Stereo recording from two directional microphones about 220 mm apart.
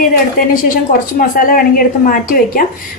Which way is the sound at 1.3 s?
40° left (ahead or behind).